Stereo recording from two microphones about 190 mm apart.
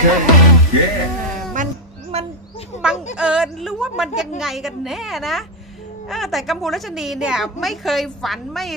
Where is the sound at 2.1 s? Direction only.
35° right (ahead or behind).